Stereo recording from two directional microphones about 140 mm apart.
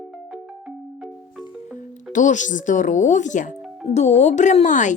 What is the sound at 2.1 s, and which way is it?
Speech, 65° left (ahead or behind).